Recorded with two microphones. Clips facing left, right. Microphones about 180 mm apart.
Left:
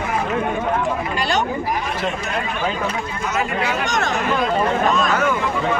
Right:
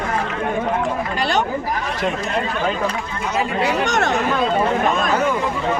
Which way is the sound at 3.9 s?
65° right (ahead or behind).